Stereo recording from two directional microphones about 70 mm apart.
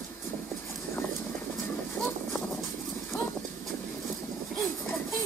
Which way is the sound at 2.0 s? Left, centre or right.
Left.